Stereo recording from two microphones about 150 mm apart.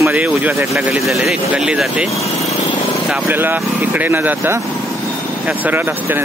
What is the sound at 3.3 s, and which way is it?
Speech, 10° right (ahead or behind).